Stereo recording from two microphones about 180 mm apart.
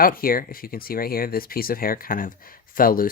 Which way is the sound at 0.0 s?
55° left (ahead or behind).